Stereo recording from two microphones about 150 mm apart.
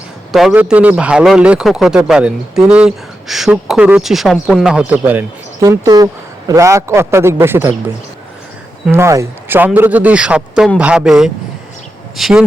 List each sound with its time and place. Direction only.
0.3 s a man's voice: centre (ahead or behind)
5.5 s a man's voice: 25° right (ahead or behind)
8.9 s a man's voice: 20° right (ahead or behind); by 12.5 s 5° right (ahead or behind)